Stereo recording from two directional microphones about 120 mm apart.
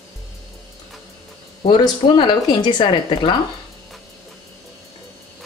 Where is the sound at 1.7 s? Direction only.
40° left (ahead or behind).